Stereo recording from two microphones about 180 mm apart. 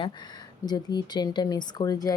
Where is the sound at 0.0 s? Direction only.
25° left (ahead or behind).